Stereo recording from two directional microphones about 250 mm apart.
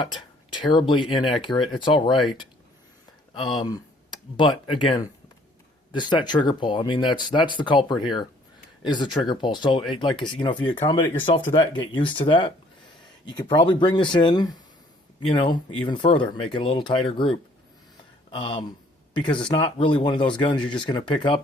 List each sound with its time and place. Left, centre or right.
0.0 s speech: centre
3.6 s speech: centre